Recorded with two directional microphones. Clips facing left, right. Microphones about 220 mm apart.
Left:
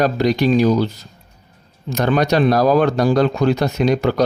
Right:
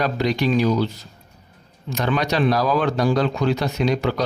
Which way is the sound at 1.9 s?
45° left (ahead or behind).